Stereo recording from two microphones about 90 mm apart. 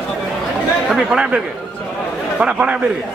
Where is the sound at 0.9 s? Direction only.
10° right (ahead or behind).